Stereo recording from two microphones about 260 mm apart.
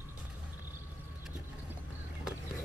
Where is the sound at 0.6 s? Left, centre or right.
Centre.